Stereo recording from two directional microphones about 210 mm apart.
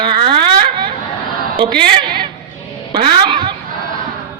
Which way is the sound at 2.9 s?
25° right (ahead or behind).